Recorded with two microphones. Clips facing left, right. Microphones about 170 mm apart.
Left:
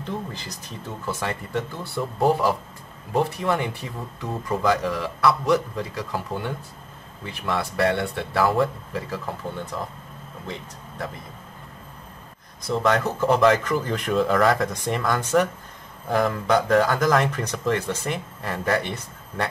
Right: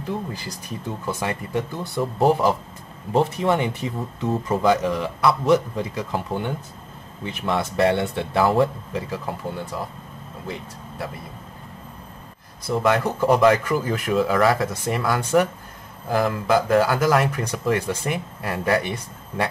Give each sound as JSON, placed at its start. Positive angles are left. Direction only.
{"t": 0.0, "sound": "speech", "side_deg": -10}
{"t": 12.6, "sound": "speech", "side_deg": -5}